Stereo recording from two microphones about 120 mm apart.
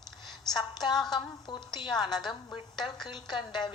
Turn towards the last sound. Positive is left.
turn(degrees=40)  # may be behind; listen again after turning